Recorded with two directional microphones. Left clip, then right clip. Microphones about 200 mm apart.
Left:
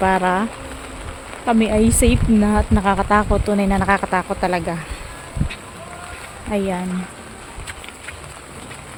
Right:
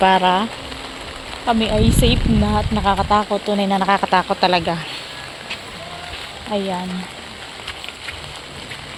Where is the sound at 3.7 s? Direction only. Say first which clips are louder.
Right 3 dB; 15° left (ahead or behind).